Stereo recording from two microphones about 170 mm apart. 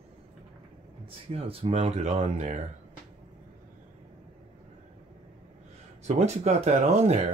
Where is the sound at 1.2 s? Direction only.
35° right (ahead or behind).